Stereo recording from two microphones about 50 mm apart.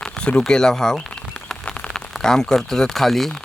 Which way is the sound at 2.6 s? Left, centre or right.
Centre.